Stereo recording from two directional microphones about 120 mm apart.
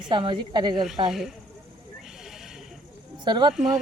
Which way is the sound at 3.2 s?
40° right (ahead or behind).